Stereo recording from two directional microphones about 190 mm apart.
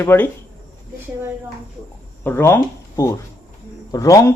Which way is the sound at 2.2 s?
10° left (ahead or behind).